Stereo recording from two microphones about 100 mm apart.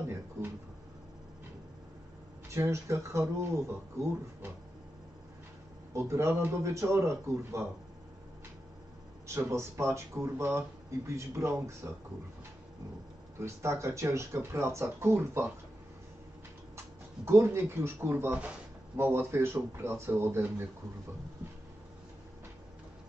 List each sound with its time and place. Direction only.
2.5 s speech: 25° right (ahead or behind)
5.9 s speech: 30° right (ahead or behind)
9.3 s speech: 25° right (ahead or behind)
13.4 s speech: 30° right (ahead or behind)
16.7 s speech: 25° right (ahead or behind)